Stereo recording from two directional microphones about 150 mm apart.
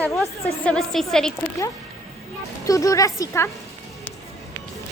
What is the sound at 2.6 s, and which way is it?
Speech, 20° left (ahead or behind).